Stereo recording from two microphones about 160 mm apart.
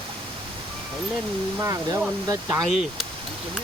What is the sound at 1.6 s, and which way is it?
Speech, 20° right (ahead or behind).